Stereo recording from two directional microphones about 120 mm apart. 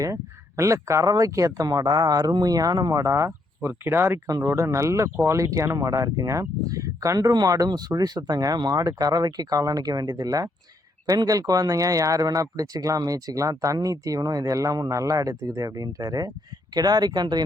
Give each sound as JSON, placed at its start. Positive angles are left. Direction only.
{"t": 0.0, "sound": "speech", "side_deg": -25}